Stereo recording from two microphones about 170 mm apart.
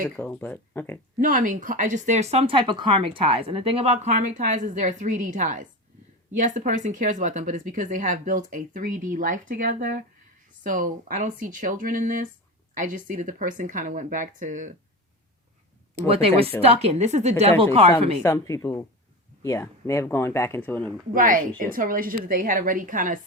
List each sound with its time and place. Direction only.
0.2 s speech: 10° left (ahead or behind)
1.2 s speech: 50° right (ahead or behind)
16.0 s a woman's voice: 35° right (ahead or behind)
18.2 s a woman's voice: 15° left (ahead or behind)
21.1 s speech: 55° right (ahead or behind)